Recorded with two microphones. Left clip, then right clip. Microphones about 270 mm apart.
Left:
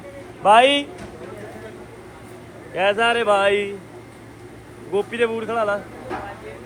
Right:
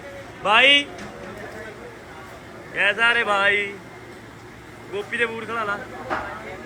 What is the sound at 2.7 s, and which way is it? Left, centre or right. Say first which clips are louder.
A man's voice: even; centre.